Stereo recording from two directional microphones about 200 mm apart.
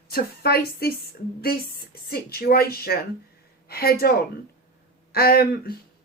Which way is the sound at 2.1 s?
50° left (ahead or behind).